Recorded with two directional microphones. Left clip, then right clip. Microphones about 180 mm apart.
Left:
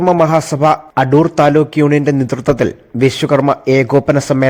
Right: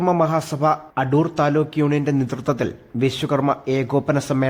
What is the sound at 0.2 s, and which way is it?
A man's voice, 25° left (ahead or behind).